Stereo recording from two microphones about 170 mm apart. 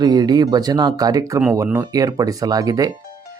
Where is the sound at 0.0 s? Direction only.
25° right (ahead or behind).